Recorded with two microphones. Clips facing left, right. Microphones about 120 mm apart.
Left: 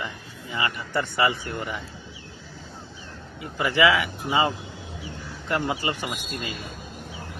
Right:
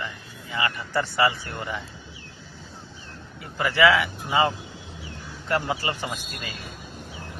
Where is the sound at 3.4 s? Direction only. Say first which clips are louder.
Right 1 dB; 20° left (ahead or behind).